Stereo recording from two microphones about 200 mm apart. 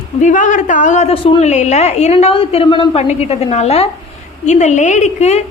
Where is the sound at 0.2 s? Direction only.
40° left (ahead or behind).